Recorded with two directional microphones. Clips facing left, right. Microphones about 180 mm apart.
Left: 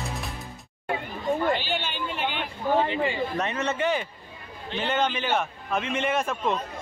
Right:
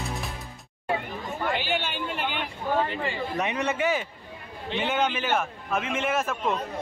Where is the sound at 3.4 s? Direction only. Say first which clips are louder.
Even; 10° right (ahead or behind).